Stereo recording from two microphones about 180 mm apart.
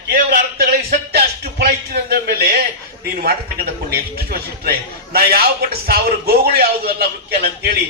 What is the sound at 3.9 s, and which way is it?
A man's voice, 55° right (ahead or behind).